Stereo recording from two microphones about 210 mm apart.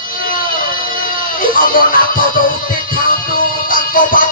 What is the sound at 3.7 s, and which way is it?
Music, 40° left (ahead or behind).